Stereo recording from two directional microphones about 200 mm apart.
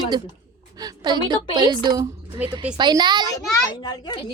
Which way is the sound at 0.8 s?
20° right (ahead or behind).